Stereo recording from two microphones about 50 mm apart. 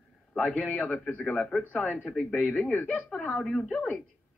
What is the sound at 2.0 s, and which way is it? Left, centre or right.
Speech, centre.